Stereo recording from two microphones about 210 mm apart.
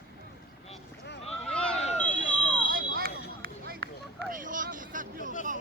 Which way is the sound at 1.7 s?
30° left (ahead or behind).